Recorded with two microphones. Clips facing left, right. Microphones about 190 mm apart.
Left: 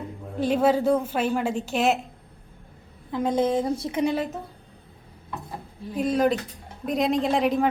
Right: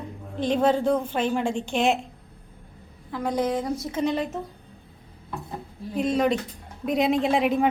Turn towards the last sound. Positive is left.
turn(degrees=0)  # may be behind; listen again after turning